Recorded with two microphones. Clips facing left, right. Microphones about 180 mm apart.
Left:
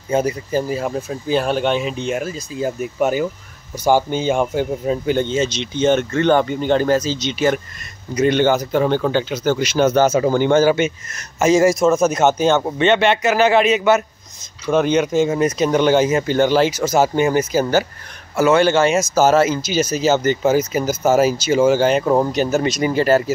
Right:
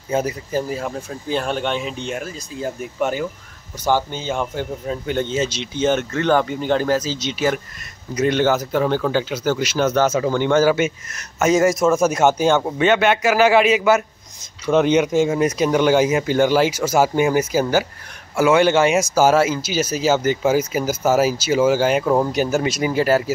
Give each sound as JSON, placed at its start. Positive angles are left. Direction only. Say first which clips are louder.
{"t": 0.1, "sound": "speech", "louder": "left 3 dB", "side_deg": -5}
{"t": 5.1, "sound": "speech", "louder": "right 1 dB", "side_deg": -5}
{"t": 10.1, "sound": "speech", "louder": "left 3 dB", "side_deg": 35}
{"t": 10.6, "sound": "speech", "louder": "left 1 dB", "side_deg": -5}
{"t": 22.0, "sound": "speech", "louder": "left 2 dB", "side_deg": 10}
{"t": 22.3, "sound": "speech", "louder": "left 2 dB", "side_deg": -10}